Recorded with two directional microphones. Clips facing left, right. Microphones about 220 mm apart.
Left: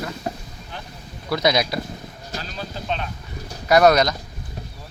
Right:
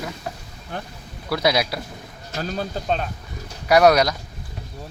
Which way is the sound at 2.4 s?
45° right (ahead or behind).